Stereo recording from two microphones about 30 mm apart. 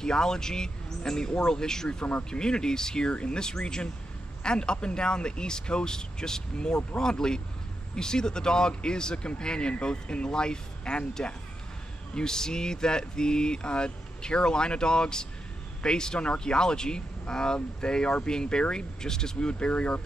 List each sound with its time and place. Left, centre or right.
0.0 s speech: left
3.1 s a man's voice: left
12.2 s speech: left
19.6 s speech: left